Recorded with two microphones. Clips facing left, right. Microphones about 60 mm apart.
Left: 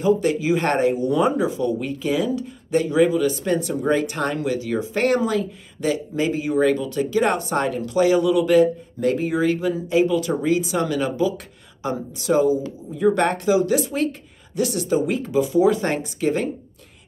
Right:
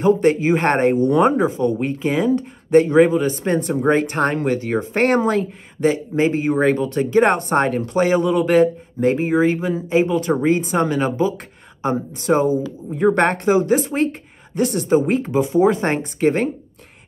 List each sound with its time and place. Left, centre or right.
0.0 s speech: right
9.0 s speech: right